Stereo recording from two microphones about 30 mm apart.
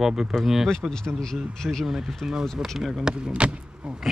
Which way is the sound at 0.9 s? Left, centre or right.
Left.